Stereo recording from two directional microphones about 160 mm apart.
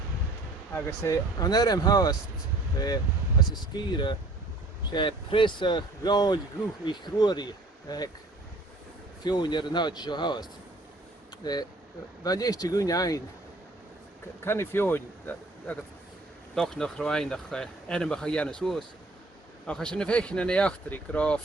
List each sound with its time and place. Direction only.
0.7 s speech: 15° left (ahead or behind)
9.2 s speech: 30° left (ahead or behind)
11.4 s speech: 25° left (ahead or behind)
14.4 s speech: 15° left (ahead or behind)